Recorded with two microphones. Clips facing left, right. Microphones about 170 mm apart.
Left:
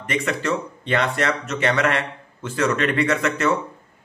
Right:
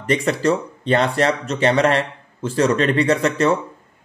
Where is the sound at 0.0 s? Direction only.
35° right (ahead or behind).